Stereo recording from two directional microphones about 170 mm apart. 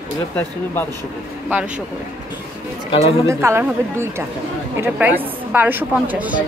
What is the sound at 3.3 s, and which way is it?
A woman's voice, 15° right (ahead or behind).